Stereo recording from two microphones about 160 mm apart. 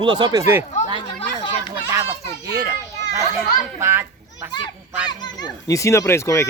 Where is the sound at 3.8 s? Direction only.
15° right (ahead or behind).